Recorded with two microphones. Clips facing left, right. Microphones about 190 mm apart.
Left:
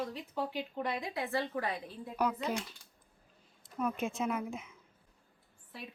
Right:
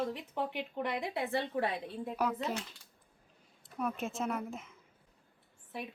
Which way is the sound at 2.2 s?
Centre (ahead or behind).